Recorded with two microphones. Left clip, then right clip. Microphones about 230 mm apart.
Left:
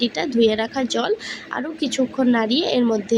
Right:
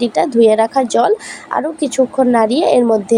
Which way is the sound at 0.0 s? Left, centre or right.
Centre.